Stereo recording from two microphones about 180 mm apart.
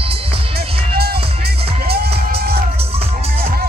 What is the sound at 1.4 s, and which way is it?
Music, 60° right (ahead or behind).